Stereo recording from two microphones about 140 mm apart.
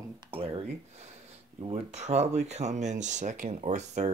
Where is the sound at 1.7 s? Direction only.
55° right (ahead or behind).